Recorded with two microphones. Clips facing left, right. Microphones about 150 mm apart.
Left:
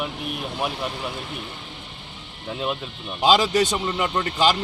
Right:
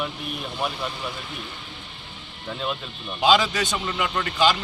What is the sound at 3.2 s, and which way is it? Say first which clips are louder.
A man's voice: left 2 dB; 35° left (ahead or behind).